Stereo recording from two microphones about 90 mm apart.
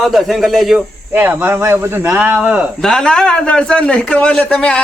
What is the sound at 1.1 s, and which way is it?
Speech, 25° right (ahead or behind).